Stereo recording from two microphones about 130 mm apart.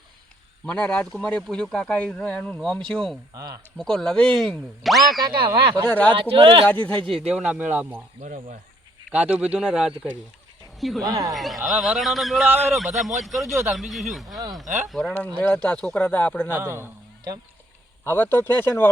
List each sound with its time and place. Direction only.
0.6 s speech: 10° left (ahead or behind)
3.3 s a man's voice: 30° right (ahead or behind)
3.8 s a man's voice: 5° left (ahead or behind)
5.5 s speech: 40° right (ahead or behind)
6.8 s a man's voice: 5° left (ahead or behind)
7.3 s speech: 5° right (ahead or behind)
8.2 s speech: 75° right (ahead or behind)
9.1 s speech: 10° right (ahead or behind)
11.0 s a man's voice: 25° right (ahead or behind)
11.3 s a man's voice: centre (ahead or behind)
16.5 s a man's voice: 20° right (ahead or behind)
18.0 s speech: 15° left (ahead or behind)